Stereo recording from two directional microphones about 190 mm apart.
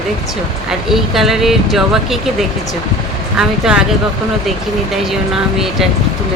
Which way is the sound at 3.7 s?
Centre (ahead or behind).